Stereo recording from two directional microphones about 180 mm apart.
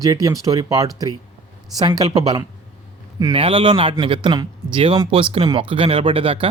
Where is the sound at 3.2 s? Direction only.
25° right (ahead or behind).